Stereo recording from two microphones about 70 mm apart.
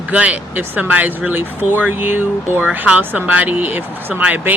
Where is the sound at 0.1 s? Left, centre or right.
Centre.